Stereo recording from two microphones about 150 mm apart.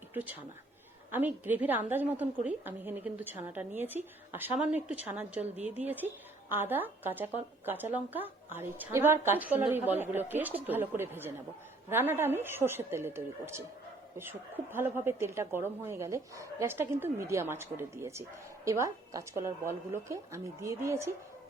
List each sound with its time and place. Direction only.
0.1 s a woman's voice: 10° right (ahead or behind)